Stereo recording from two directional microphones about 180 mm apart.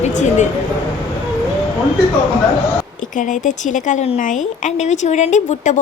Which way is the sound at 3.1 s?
45° left (ahead or behind).